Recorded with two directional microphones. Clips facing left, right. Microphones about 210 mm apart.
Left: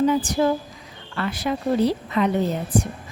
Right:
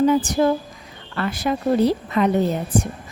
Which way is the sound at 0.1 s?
45° right (ahead or behind).